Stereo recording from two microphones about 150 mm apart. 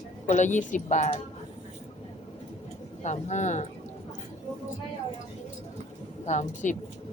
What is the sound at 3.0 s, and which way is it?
Speech, 50° left (ahead or behind).